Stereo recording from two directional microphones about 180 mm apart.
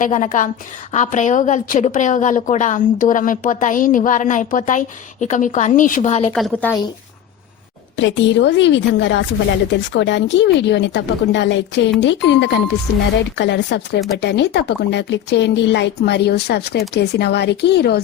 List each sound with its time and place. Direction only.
0.0 s a woman's voice: 45° left (ahead or behind)
7.9 s a woman's voice: 85° left; by 18.0 s 65° left (ahead or behind)